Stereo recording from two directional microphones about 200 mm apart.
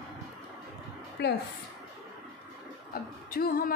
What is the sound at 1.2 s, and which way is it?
Speech, 60° left (ahead or behind).